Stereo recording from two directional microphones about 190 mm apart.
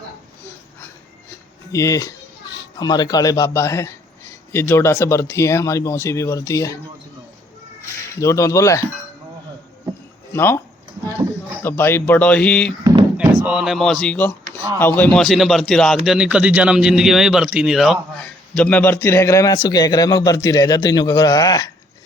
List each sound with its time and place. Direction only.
1.3 s speech: 15° left (ahead or behind)
8.2 s speech: 15° left (ahead or behind)
10.3 s speech: 10° left (ahead or behind)
11.6 s speech: 10° left (ahead or behind)
13.1 s a man's voice: 5° right (ahead or behind); by 21.7 s 20° left (ahead or behind)